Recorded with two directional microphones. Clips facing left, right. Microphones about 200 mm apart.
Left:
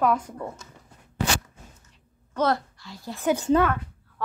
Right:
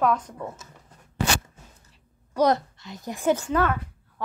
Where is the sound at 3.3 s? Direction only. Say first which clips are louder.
Left 5 dB; 25° left (ahead or behind).